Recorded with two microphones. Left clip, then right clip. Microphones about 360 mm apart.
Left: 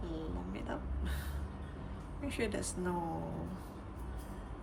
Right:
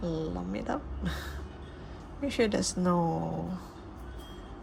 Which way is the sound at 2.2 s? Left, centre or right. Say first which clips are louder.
Right 10 dB; centre.